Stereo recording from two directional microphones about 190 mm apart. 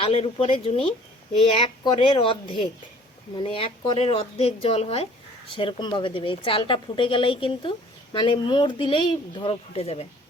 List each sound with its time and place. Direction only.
0.0 s a woman's voice: 30° left (ahead or behind)